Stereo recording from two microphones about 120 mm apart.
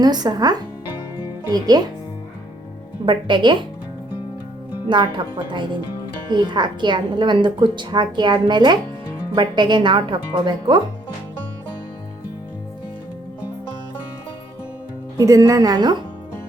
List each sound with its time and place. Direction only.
0.0 s a woman's voice: 35° right (ahead or behind)
3.1 s a woman's voice: 40° right (ahead or behind)
4.9 s a woman's voice: 40° right (ahead or behind)
15.2 s a woman's voice: 25° right (ahead or behind)